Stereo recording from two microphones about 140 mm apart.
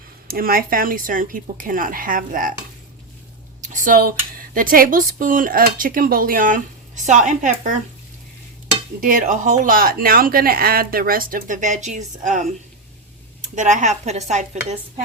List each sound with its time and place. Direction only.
0.3 s speech: 90° right
3.6 s speech: 60° right (ahead or behind)
9.0 s speech: 75° right (ahead or behind); by 14.8 s 55° right (ahead or behind)